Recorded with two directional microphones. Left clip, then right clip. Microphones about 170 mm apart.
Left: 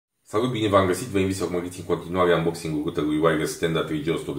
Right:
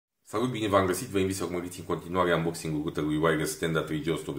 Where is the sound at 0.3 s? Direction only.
40° right (ahead or behind).